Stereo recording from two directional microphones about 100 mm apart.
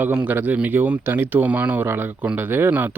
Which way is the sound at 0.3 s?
15° right (ahead or behind).